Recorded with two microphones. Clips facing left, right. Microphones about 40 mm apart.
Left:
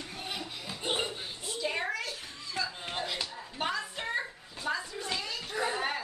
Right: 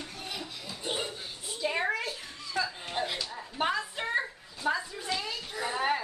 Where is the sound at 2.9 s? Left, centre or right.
Centre.